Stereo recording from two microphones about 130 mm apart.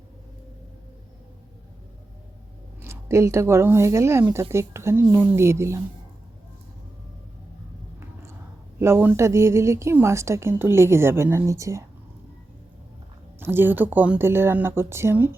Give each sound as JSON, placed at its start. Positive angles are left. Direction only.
{"t": 2.8, "sound": "a woman's voice", "side_deg": -20}
{"t": 8.8, "sound": "a woman's voice", "side_deg": -20}
{"t": 13.4, "sound": "speech", "side_deg": -15}